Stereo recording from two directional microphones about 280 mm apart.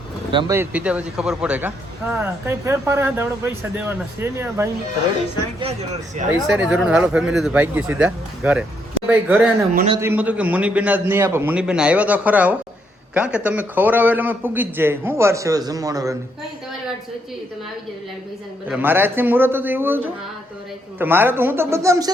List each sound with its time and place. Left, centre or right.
0.3 s a man's voice: centre
5.5 s speech: right
6.5 s a man's voice: centre
9.7 s speech: right
10.0 s a man's voice: centre
18.7 s a man's voice: centre
21.0 s a man's voice: centre